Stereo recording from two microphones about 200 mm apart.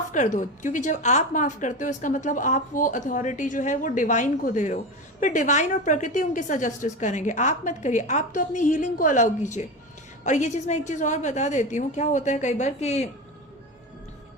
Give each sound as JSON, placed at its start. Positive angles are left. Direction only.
{"t": 0.1, "sound": "speech", "side_deg": 40}